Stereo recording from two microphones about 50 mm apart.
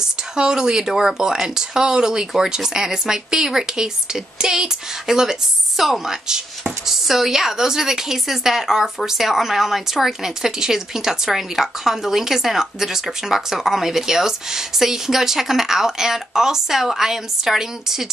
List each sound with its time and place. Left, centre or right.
0.0 s speech: centre